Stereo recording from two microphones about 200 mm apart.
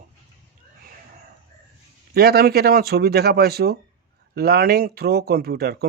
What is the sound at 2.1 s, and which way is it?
A man's voice, 50° right (ahead or behind).